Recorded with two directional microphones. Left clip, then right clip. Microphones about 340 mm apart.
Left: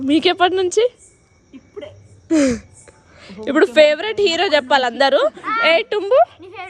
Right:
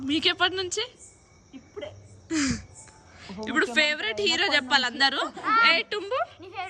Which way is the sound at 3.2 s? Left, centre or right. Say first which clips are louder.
Left 10 dB; centre.